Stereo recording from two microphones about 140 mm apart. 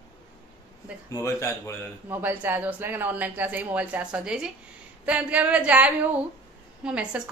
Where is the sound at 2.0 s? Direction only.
15° right (ahead or behind).